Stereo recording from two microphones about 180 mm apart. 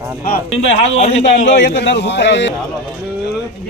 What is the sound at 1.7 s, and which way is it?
Speech, 75° left (ahead or behind).